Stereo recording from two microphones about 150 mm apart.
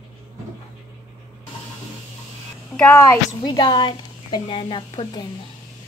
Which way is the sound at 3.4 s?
30° left (ahead or behind).